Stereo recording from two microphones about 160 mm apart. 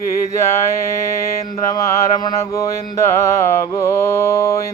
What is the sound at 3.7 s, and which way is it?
Speech, 20° left (ahead or behind).